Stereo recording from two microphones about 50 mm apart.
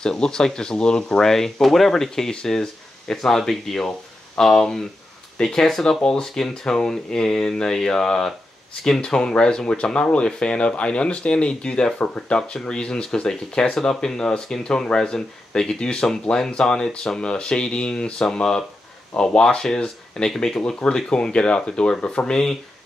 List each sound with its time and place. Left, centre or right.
0.0 s speech: centre
22.2 s speech: centre